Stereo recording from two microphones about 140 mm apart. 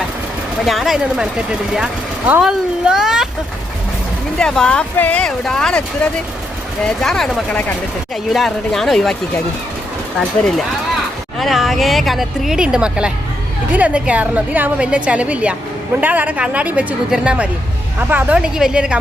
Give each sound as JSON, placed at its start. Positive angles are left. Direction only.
{"t": 0.6, "sound": "speech", "side_deg": 0}
{"t": 4.4, "sound": "speech", "side_deg": 5}
{"t": 11.3, "sound": "a woman's voice", "side_deg": 0}